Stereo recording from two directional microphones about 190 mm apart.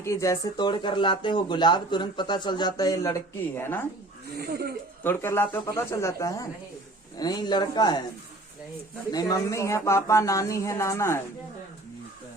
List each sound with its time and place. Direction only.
0.0 s speech: 15° left (ahead or behind)
4.4 s speech: 55° right (ahead or behind)
5.0 s speech: 10° left (ahead or behind)
9.1 s speech: 20° left (ahead or behind)